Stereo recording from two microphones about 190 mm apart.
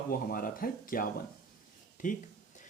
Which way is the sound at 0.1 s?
50° left (ahead or behind).